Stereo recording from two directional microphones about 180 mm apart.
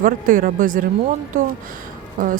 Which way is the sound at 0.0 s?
50° right (ahead or behind).